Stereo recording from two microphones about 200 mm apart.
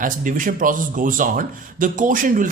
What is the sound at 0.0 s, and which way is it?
Speech, 40° right (ahead or behind).